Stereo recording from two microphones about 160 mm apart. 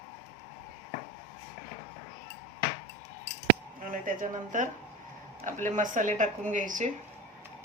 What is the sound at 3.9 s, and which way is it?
Speech, 55° right (ahead or behind).